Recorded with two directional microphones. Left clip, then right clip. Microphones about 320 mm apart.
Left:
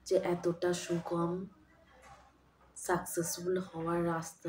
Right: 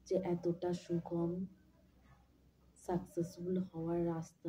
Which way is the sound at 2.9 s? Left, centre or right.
Right.